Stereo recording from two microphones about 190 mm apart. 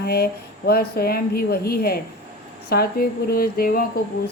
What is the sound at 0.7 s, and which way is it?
Speech, 55° left (ahead or behind).